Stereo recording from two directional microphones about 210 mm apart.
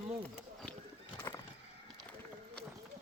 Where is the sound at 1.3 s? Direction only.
15° left (ahead or behind).